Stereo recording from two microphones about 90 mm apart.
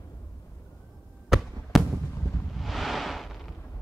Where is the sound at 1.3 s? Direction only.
Centre (ahead or behind).